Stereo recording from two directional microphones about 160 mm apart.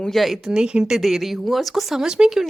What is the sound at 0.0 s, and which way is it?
Speech, centre (ahead or behind).